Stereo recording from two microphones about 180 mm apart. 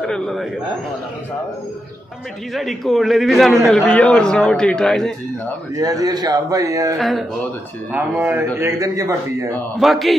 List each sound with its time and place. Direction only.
0.0 s a man's voice: 5° left (ahead or behind)
2.5 s a man's voice: centre (ahead or behind)
5.8 s a man's voice: 20° right (ahead or behind)
7.0 s a man's voice: centre (ahead or behind); by 9.5 s 15° right (ahead or behind)
9.8 s a man's voice: centre (ahead or behind)